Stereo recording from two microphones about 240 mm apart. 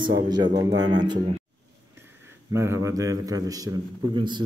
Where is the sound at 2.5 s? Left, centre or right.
Centre.